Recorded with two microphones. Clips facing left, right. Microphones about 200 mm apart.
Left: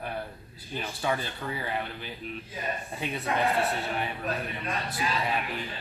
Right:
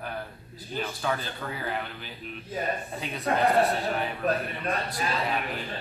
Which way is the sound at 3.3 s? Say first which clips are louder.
Right 4 dB; 45° right (ahead or behind).